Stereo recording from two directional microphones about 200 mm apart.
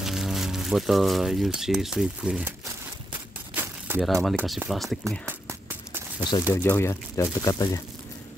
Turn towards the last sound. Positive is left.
turn(degrees=15)  # may be behind; listen again after turning